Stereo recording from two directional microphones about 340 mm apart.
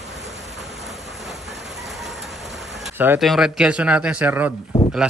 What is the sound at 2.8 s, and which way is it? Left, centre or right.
Speech, centre.